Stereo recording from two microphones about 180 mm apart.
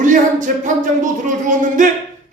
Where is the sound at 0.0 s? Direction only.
45° right (ahead or behind).